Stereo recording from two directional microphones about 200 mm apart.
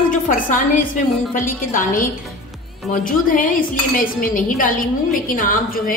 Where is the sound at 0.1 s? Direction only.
40° left (ahead or behind).